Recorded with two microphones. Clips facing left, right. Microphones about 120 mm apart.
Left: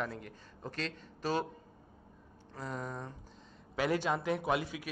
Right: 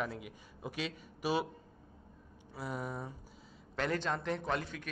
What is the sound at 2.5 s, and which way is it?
Speech, 10° right (ahead or behind).